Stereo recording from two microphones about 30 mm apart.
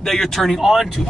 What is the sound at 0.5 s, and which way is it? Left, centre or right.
Speech, centre.